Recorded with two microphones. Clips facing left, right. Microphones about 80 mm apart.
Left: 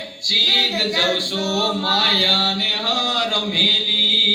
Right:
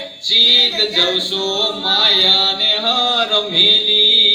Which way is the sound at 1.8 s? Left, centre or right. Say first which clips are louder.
Right 1 dB; right.